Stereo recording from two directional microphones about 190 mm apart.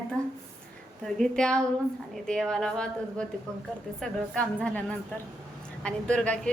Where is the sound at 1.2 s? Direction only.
5° left (ahead or behind).